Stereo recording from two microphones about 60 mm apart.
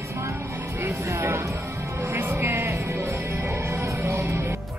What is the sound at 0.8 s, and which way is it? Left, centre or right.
Speech, right.